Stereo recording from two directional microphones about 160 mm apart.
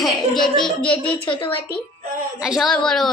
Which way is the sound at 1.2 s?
35° left (ahead or behind).